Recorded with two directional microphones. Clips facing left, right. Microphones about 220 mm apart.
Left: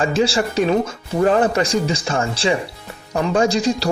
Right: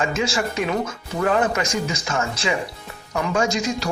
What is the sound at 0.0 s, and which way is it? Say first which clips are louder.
Speech: left 5 dB; 35° left (ahead or behind).